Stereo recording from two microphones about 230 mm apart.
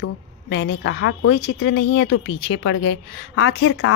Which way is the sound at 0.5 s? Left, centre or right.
Left.